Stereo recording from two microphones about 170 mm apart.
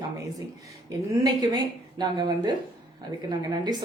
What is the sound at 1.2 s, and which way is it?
A woman's voice, 25° right (ahead or behind).